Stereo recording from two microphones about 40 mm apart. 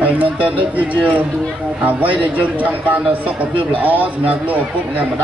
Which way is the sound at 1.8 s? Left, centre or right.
Right.